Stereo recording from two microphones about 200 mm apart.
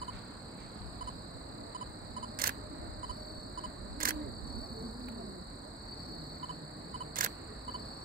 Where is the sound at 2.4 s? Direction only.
45° right (ahead or behind).